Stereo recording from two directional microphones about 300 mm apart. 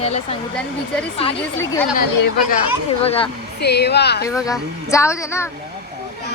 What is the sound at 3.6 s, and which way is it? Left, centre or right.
Speech, left.